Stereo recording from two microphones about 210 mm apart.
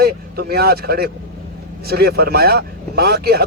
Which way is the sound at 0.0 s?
45° right (ahead or behind).